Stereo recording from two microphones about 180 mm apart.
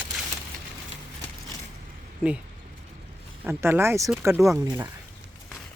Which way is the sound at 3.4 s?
15° right (ahead or behind).